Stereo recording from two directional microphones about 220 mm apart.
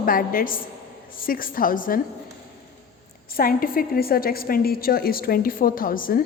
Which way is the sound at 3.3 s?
40° left (ahead or behind).